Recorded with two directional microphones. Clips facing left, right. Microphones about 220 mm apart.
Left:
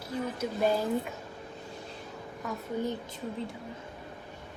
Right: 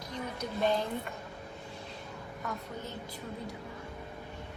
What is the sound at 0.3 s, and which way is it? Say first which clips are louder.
Speech: left 1 dB; 5° left (ahead or behind).